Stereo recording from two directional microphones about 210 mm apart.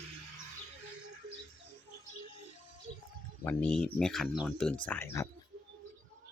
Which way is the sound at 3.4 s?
5° left (ahead or behind).